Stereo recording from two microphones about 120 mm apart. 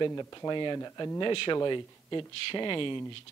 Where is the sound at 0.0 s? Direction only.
35° left (ahead or behind).